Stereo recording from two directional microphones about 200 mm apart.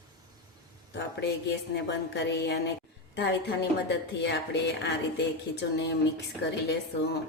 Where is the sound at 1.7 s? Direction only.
60° left (ahead or behind).